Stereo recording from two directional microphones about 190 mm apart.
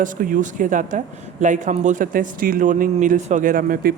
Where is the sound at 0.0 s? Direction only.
45° right (ahead or behind).